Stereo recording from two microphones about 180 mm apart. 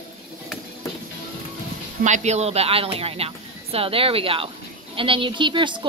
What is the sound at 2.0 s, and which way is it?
A woman's voice, 40° right (ahead or behind).